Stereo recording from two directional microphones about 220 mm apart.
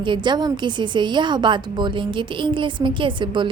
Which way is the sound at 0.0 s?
20° right (ahead or behind).